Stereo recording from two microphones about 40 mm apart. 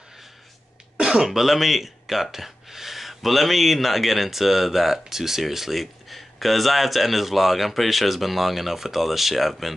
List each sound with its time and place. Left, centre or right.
0.9 s throat clearing: centre
1.2 s speech: centre